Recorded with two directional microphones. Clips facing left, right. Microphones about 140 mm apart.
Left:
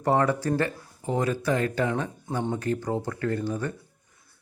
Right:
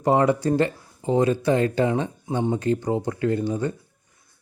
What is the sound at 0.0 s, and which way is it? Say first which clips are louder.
Speech: right 4 dB; 15° right (ahead or behind).